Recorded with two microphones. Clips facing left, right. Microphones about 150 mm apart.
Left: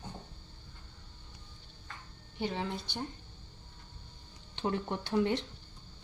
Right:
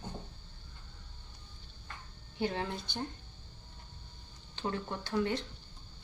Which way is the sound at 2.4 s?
Centre (ahead or behind).